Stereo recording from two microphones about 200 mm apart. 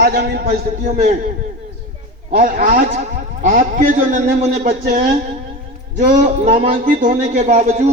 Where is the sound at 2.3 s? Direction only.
40° right (ahead or behind).